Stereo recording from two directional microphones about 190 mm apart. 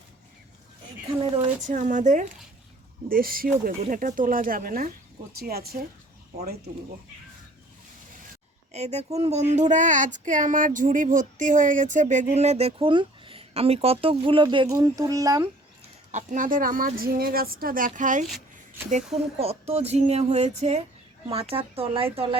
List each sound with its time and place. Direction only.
1.6 s speech: 40° right (ahead or behind)
8.7 s a child's voice: 35° right (ahead or behind); by 15.4 s 20° right (ahead or behind)
16.1 s speech: 40° right (ahead or behind)
19.4 s speech: 30° right (ahead or behind)